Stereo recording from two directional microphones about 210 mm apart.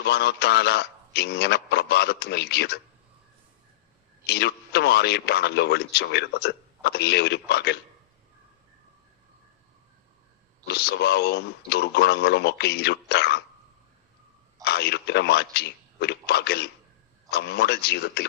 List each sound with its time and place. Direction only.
0.0 s a man's voice: 50° left (ahead or behind)
4.3 s a man's voice: 50° left (ahead or behind)
10.7 s a man's voice: 50° left (ahead or behind)
14.6 s a man's voice: 50° left (ahead or behind)